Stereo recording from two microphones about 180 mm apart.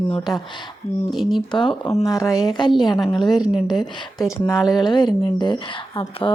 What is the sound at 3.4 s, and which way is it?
Speech, 5° right (ahead or behind).